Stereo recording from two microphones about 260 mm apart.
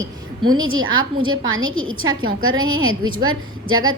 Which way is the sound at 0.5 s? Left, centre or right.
Right.